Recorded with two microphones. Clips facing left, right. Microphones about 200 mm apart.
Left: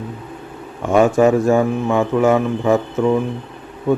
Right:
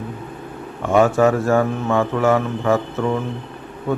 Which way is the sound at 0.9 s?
15° left (ahead or behind).